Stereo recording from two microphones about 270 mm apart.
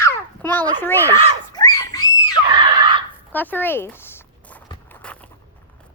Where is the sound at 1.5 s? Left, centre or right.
Centre.